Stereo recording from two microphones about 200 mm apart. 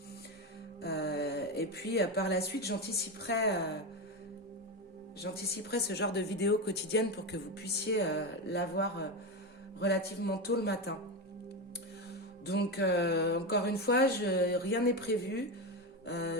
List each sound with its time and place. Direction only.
0.8 s speech: 55° left (ahead or behind)
5.2 s speech: 55° left (ahead or behind)
12.5 s speech: 55° left (ahead or behind)